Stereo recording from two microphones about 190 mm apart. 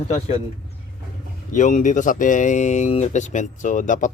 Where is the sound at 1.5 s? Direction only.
40° left (ahead or behind).